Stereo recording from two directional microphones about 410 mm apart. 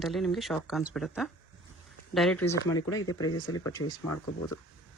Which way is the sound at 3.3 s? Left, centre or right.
Left.